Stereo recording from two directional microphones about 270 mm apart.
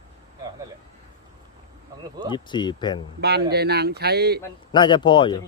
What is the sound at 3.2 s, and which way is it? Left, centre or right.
Speech, right.